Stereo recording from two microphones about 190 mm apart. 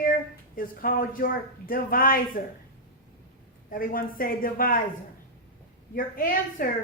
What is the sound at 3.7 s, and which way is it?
A woman's voice, 50° left (ahead or behind).